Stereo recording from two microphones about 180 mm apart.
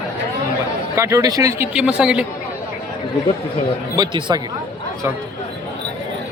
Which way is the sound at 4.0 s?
20° right (ahead or behind).